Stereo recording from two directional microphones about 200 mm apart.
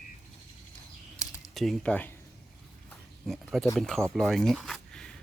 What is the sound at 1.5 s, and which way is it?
Speech, centre (ahead or behind).